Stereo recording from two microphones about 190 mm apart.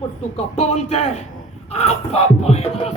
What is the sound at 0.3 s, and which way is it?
A man's voice, 35° left (ahead or behind).